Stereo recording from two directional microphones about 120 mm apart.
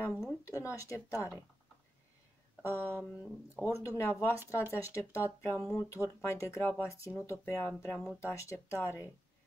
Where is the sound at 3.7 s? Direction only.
25° left (ahead or behind).